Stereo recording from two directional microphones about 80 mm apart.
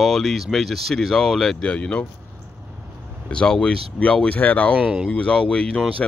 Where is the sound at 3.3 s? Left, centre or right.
Centre.